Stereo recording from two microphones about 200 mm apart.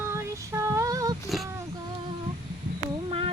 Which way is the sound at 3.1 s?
30° right (ahead or behind).